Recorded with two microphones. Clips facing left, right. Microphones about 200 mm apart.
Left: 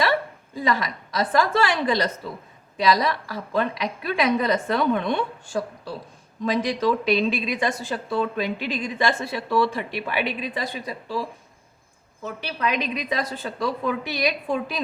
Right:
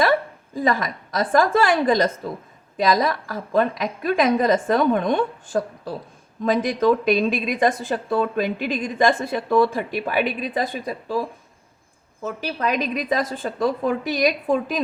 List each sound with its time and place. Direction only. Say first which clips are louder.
0.5 s a woman's voice: right 3 dB; 50° right (ahead or behind)
12.2 s a woman's voice: right 3 dB; 45° right (ahead or behind)